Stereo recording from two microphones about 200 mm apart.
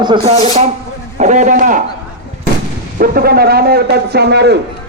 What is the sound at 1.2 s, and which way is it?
Speech, 35° right (ahead or behind).